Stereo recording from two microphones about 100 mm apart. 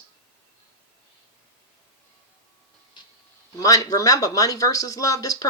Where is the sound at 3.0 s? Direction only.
50° left (ahead or behind).